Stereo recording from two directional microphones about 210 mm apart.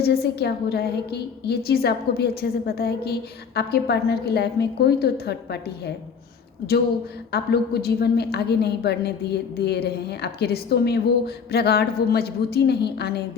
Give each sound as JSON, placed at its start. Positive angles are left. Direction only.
{"t": 0.0, "sound": "a woman's voice", "side_deg": 50}
{"t": 7.3, "sound": "a woman's voice", "side_deg": 50}